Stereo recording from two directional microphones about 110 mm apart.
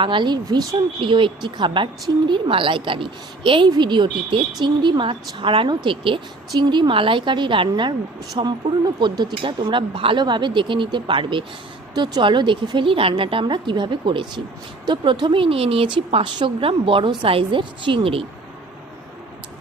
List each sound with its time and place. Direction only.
0.0 s a woman's voice: 45° right (ahead or behind)
0.9 s a woman's voice: 50° right (ahead or behind)